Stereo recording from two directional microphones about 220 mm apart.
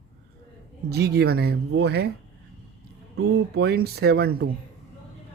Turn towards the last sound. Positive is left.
turn(degrees=-45)  # may be behind; listen again after turning